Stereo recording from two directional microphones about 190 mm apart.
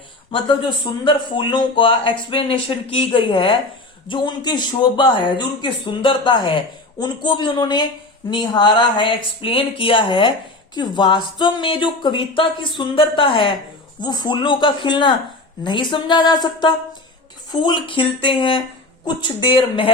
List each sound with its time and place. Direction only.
0.3 s speech: 25° left (ahead or behind)